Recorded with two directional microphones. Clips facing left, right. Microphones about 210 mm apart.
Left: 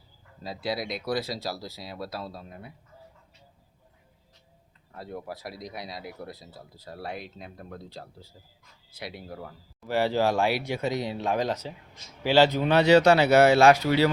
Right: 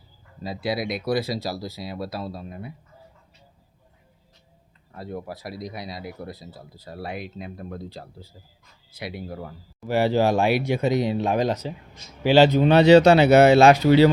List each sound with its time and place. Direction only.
0.4 s speech: 10° right (ahead or behind)
4.9 s speech: 5° right (ahead or behind); by 14.1 s 25° right (ahead or behind)